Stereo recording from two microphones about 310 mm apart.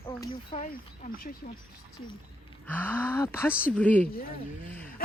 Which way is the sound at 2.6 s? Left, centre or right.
Centre.